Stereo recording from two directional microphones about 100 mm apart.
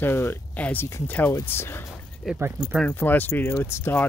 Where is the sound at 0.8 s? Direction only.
30° left (ahead or behind).